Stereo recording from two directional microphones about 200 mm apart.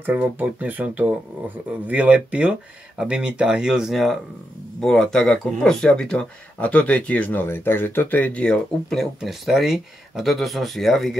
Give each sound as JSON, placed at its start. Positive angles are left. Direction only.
{"t": 0.0, "sound": "speech", "side_deg": -10}